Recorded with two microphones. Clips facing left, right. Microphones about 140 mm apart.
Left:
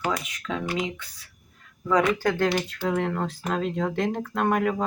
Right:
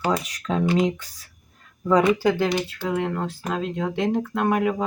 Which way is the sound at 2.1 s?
10° right (ahead or behind).